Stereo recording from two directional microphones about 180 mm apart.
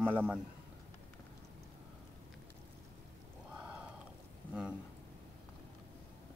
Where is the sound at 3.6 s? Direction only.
5° right (ahead or behind).